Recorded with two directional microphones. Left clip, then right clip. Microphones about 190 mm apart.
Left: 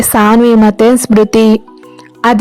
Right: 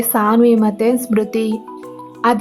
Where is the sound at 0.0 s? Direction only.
40° left (ahead or behind).